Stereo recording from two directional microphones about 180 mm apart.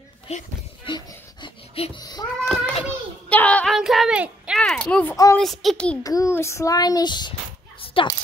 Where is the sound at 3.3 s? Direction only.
5° left (ahead or behind).